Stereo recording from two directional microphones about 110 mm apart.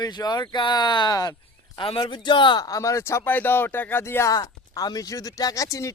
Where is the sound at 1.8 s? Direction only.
50° left (ahead or behind); by 4.3 s 20° left (ahead or behind).